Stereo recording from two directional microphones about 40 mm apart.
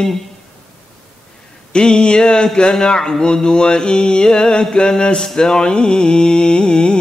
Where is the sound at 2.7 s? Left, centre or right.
Centre.